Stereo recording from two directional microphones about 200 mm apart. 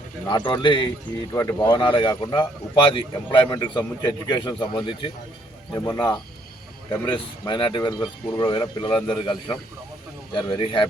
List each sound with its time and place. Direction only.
0.3 s speech: 20° left (ahead or behind)